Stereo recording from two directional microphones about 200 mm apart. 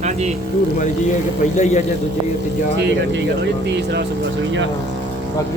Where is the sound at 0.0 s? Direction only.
35° right (ahead or behind).